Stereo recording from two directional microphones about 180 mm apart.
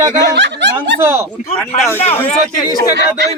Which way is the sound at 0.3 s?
90° right.